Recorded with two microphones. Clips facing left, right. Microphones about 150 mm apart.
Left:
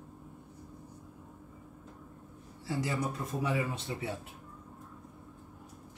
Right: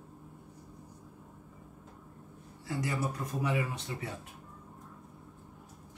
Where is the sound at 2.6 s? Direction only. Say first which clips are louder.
Left 1 dB; 25° left (ahead or behind).